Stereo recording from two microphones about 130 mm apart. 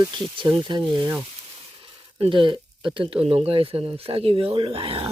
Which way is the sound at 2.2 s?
40° right (ahead or behind).